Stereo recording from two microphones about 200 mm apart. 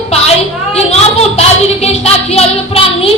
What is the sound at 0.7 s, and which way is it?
A woman's voice, 30° left (ahead or behind).